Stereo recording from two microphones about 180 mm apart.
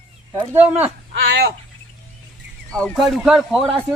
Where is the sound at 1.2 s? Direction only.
70° right (ahead or behind).